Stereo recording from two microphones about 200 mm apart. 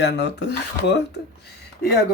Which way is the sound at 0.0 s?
60° left (ahead or behind).